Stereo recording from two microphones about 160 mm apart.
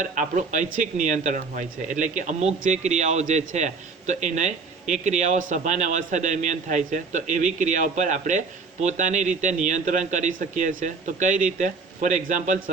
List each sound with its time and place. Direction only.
0.0 s speech: 50° right (ahead or behind)